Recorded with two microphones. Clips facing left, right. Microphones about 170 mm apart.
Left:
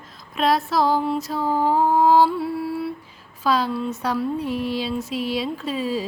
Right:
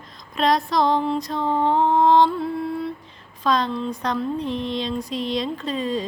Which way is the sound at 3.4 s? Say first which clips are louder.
Even; 5° left (ahead or behind).